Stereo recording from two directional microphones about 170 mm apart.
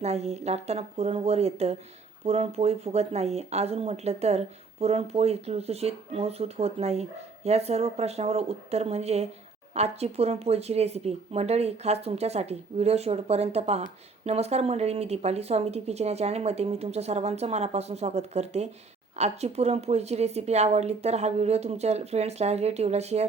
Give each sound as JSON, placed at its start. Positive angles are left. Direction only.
{"t": 0.0, "sound": "speech", "side_deg": -40}